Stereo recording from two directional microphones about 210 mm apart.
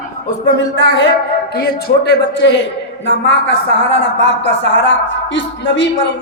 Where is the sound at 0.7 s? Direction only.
60° left (ahead or behind).